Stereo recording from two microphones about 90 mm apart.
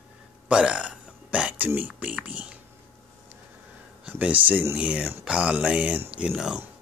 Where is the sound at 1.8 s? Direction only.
15° right (ahead or behind).